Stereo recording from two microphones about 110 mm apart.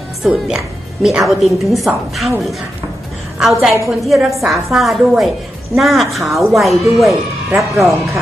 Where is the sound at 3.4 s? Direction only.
Centre (ahead or behind).